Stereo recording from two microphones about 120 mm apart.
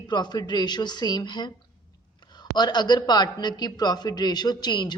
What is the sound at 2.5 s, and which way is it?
A woman's voice, 35° left (ahead or behind).